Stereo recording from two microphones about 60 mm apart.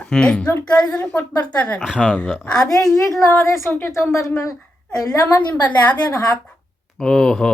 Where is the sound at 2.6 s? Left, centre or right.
Left.